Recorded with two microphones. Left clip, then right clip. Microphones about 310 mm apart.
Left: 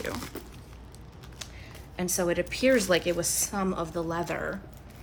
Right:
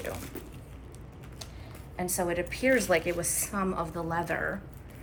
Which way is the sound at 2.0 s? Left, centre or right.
Centre.